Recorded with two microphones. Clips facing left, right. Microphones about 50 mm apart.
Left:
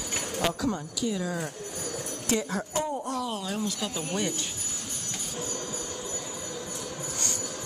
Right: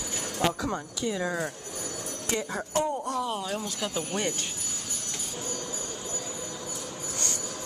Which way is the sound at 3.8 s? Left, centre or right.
Right.